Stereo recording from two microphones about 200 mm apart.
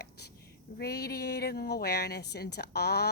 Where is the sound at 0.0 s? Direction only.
55° left (ahead or behind).